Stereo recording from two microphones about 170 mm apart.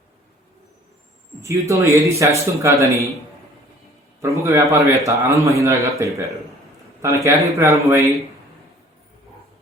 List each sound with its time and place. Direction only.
1.4 s a man's voice: 15° right (ahead or behind)
4.2 s a man's voice: 15° right (ahead or behind)